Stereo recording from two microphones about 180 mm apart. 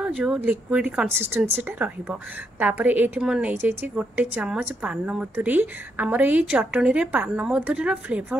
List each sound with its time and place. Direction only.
0.0 s a woman's voice: 5° right (ahead or behind)